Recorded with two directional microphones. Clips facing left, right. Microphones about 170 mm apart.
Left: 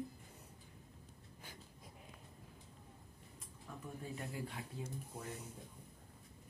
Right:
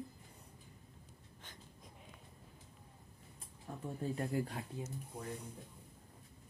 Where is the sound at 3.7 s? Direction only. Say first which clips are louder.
Right 4 dB; 30° right (ahead or behind).